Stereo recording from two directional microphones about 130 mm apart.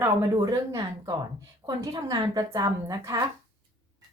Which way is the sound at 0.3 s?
30° right (ahead or behind).